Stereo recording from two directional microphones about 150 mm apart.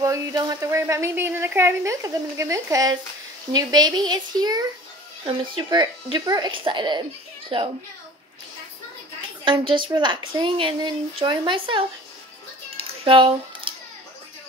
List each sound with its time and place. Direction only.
0.0 s a woman's voice: 25° right (ahead or behind)
9.4 s a woman's voice: 35° right (ahead or behind)
12.7 s a sound: 35° right (ahead or behind)